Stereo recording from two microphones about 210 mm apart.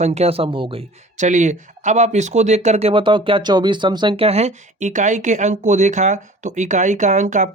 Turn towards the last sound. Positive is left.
turn(degrees=-35)  # may be behind; listen again after turning